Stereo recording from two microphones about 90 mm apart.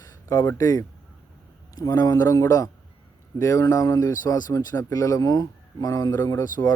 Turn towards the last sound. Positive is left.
turn(degrees=40)  # may be behind; listen again after turning